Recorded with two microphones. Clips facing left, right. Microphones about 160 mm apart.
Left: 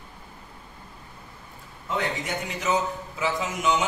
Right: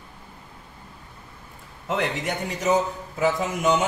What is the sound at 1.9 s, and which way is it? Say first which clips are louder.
Speech: right 3 dB; 70° right (ahead or behind).